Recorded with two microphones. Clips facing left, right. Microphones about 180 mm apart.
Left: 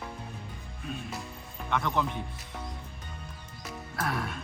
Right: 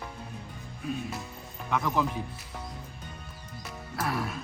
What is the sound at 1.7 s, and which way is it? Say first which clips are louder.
Speech: right 1 dB; 5° right (ahead or behind).